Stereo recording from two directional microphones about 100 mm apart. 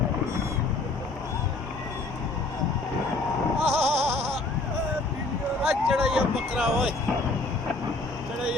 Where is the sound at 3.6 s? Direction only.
90° right.